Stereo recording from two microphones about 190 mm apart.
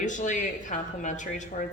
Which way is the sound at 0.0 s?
40° left (ahead or behind).